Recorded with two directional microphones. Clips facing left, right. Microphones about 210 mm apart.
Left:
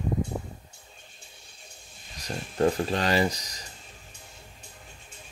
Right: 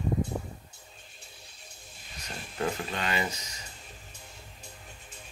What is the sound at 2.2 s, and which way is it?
Speech, 35° left (ahead or behind).